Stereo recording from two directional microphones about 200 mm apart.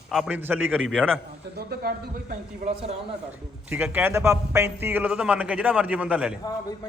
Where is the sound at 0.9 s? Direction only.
Centre (ahead or behind).